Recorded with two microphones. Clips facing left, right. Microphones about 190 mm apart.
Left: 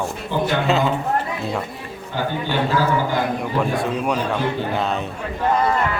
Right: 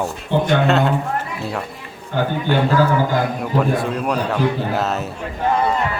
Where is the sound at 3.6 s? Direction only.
Centre (ahead or behind).